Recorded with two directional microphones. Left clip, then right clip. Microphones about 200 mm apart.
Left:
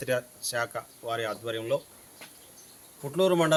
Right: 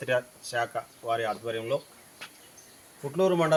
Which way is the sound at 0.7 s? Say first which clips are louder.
Right 3 dB; 25° left (ahead or behind).